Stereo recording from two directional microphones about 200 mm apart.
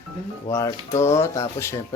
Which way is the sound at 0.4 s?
15° left (ahead or behind).